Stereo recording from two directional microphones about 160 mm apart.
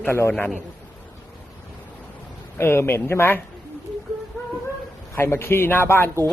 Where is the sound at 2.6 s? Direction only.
15° left (ahead or behind).